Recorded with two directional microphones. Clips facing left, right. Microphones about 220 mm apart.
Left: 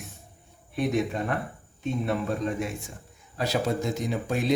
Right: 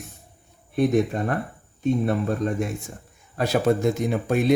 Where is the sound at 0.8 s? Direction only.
50° right (ahead or behind).